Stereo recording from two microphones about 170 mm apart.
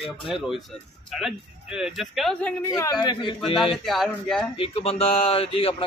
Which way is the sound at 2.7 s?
25° left (ahead or behind).